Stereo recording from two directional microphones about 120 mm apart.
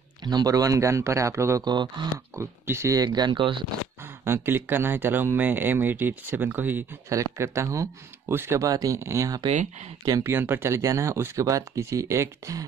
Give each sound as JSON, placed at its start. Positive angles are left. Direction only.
{"t": 0.2, "sound": "speech", "side_deg": -35}
{"t": 2.3, "sound": "speech", "side_deg": -20}
{"t": 4.0, "sound": "speech", "side_deg": -20}
{"t": 9.5, "sound": "speech", "side_deg": -80}
{"t": 10.0, "sound": "speech", "side_deg": -25}